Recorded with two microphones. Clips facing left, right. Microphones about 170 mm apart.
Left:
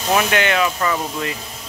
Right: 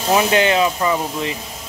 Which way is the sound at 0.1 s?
20° right (ahead or behind).